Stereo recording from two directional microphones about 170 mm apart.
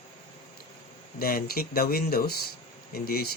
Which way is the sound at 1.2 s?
60° left (ahead or behind).